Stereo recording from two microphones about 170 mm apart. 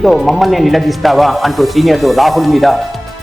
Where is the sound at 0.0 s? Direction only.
Centre (ahead or behind).